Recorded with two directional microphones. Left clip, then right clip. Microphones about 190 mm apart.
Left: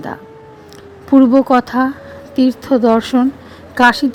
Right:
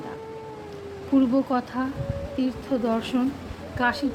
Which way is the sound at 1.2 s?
45° left (ahead or behind).